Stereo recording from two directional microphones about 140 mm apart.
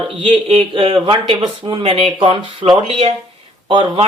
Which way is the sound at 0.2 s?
40° right (ahead or behind).